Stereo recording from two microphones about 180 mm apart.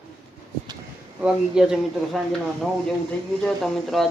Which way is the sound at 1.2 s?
5° right (ahead or behind).